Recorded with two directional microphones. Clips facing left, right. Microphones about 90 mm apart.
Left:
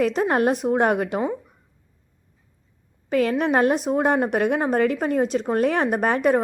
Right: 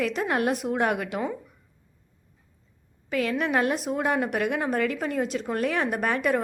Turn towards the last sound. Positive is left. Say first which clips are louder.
# left 5 dB
turn(degrees=35)  # may be behind; listen again after turning